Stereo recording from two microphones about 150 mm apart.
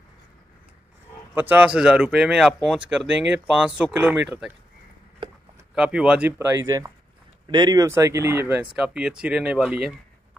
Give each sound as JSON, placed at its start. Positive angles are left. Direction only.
{"t": 1.3, "sound": "speech", "side_deg": -10}
{"t": 5.8, "sound": "speech", "side_deg": -5}
{"t": 8.7, "sound": "speech", "side_deg": -5}